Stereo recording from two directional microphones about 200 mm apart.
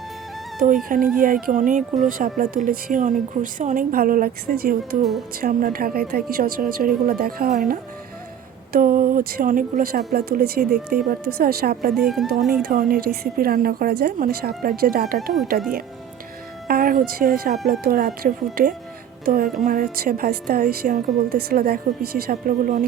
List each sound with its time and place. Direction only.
0.9 s a woman's voice: 45° right (ahead or behind)
11.9 s speech: centre (ahead or behind)
12.6 s a woman's voice: 50° right (ahead or behind)
16.6 s a woman's voice: 45° right (ahead or behind)